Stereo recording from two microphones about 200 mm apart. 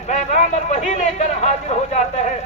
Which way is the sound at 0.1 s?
35° left (ahead or behind).